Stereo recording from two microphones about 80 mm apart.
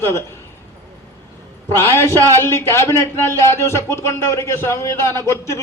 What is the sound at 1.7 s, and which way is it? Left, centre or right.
A man's voice, left.